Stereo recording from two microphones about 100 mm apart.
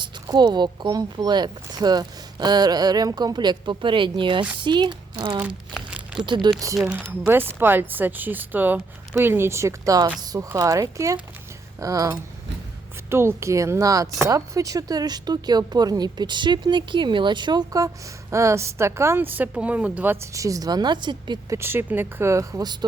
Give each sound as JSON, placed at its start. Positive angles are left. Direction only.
{"t": 0.0, "sound": "speech", "side_deg": -45}
{"t": 6.2, "sound": "speech", "side_deg": -50}
{"t": 7.1, "sound": "speech", "side_deg": -20}
{"t": 13.1, "sound": "speech", "side_deg": -25}
{"t": 20.3, "sound": "speech", "side_deg": -35}
{"t": 21.5, "sound": "speech", "side_deg": -25}
{"t": 22.6, "sound": "speech", "side_deg": -45}